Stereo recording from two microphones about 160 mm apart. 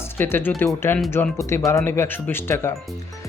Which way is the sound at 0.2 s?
15° left (ahead or behind).